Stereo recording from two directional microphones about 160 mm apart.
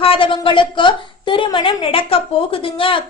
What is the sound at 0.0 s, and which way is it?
A woman's voice, 35° left (ahead or behind).